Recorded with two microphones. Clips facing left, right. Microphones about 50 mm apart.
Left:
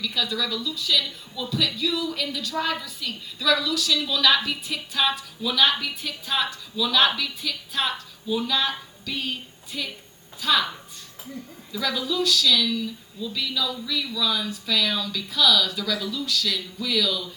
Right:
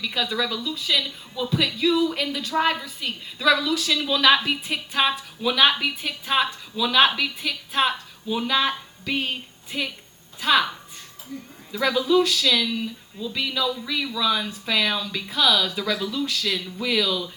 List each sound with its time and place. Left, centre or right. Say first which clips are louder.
0.0 s a woman's voice: right 2 dB; right
11.7 s speech: right 7 dB; right